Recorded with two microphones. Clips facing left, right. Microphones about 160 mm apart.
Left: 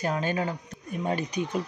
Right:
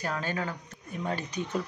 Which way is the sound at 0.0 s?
20° left (ahead or behind).